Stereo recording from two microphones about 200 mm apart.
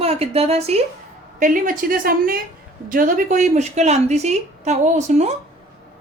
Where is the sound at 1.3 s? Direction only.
40° right (ahead or behind).